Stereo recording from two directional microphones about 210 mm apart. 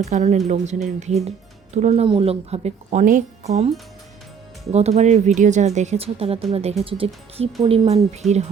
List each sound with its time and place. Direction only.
0.0 s speech: 35° right (ahead or behind)
4.7 s speech: 30° right (ahead or behind)